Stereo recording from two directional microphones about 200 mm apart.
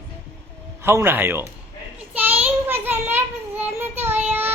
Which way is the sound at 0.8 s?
10° right (ahead or behind).